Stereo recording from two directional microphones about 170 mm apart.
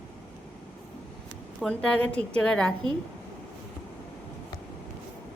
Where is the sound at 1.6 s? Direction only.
5° left (ahead or behind).